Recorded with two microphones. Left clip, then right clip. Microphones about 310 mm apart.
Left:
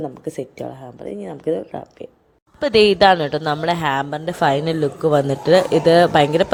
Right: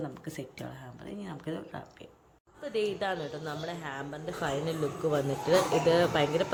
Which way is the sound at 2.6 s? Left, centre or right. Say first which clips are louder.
Left 19 dB; left.